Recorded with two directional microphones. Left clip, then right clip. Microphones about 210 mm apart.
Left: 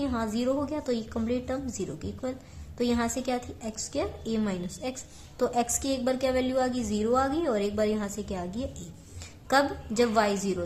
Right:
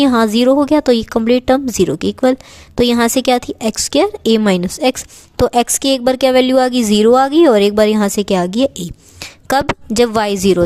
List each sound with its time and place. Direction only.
0.0 s a woman's voice: 50° right (ahead or behind)